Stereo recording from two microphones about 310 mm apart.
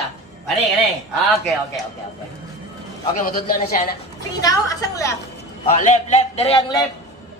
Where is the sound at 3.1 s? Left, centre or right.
Left.